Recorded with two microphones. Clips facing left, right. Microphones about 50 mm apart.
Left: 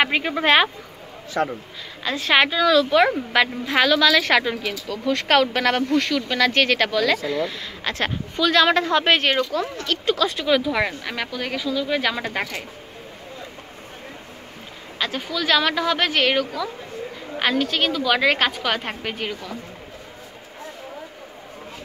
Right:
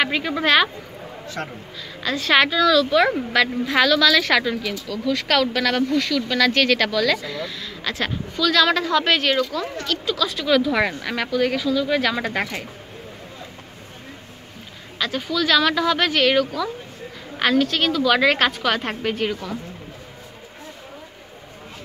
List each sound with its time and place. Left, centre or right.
0.0 s speech: left
2.0 s speech: centre
6.1 s speech: centre
10.4 s a woman's voice: centre
10.7 s a woman's voice: centre
15.0 s a woman's voice: centre